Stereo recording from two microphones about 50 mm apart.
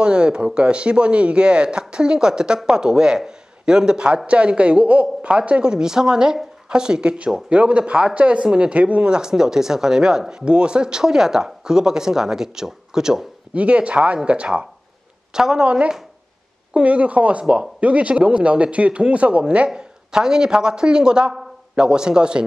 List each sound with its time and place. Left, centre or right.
0.0 s speech: centre
13.6 s speech: right
19.7 s a man's voice: centre